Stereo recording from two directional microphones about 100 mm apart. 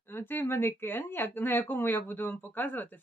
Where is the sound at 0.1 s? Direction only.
20° left (ahead or behind).